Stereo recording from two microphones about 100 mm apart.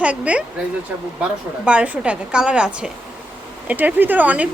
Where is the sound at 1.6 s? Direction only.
15° right (ahead or behind).